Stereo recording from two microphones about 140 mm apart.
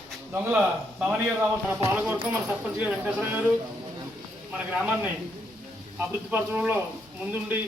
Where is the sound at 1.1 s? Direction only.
10° right (ahead or behind).